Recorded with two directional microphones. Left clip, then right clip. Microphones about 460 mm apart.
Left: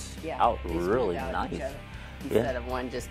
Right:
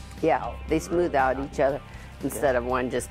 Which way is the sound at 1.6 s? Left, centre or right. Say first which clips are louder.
Right 13 dB; right.